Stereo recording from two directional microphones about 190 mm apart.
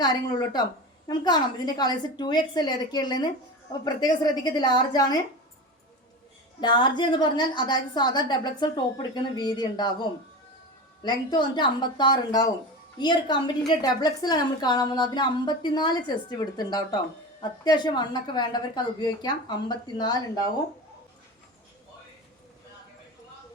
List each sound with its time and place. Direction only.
0.0 s a woman's voice: 20° left (ahead or behind)
6.6 s a woman's voice: 25° left (ahead or behind)